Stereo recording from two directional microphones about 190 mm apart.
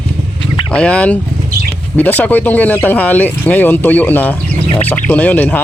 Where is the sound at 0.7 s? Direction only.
5° left (ahead or behind).